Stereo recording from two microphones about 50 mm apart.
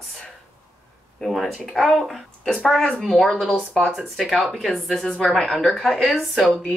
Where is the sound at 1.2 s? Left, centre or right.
Centre.